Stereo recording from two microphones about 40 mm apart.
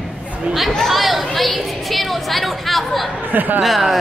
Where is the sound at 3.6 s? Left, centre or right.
Centre.